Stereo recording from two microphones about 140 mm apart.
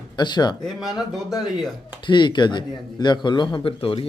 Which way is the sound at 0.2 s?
30° left (ahead or behind).